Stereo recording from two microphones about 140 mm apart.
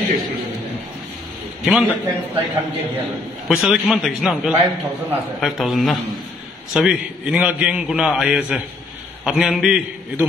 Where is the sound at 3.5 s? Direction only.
Centre (ahead or behind).